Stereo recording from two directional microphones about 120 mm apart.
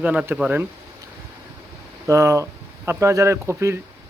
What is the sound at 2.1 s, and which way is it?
Speech, 25° right (ahead or behind).